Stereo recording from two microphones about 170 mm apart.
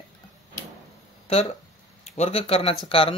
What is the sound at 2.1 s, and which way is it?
Speech, 35° left (ahead or behind).